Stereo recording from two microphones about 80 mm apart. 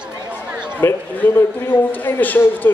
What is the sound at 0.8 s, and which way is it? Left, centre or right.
A man's voice, left.